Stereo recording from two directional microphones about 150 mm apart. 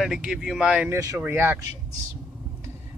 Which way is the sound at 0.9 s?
20° right (ahead or behind).